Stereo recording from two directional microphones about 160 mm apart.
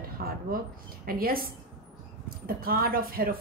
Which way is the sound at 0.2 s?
70° right (ahead or behind).